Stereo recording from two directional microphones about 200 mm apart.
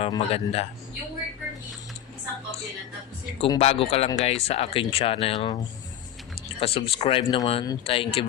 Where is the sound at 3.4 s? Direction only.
30° left (ahead or behind).